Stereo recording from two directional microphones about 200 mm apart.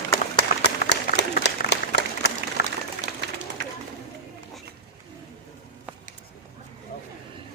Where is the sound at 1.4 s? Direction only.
55° left (ahead or behind).